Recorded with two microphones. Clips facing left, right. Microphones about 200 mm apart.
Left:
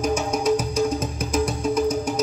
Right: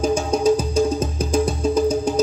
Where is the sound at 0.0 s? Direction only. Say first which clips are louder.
Right 4 dB; 30° right (ahead or behind).